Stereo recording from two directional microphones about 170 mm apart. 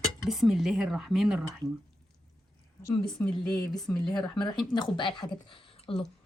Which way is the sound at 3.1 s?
5° left (ahead or behind).